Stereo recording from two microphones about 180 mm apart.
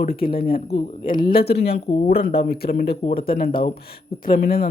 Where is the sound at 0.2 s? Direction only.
55° left (ahead or behind).